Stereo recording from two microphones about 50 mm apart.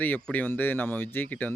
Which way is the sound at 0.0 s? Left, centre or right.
Left.